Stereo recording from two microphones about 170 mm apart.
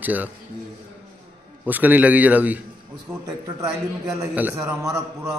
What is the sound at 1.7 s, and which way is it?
Speech, 10° right (ahead or behind).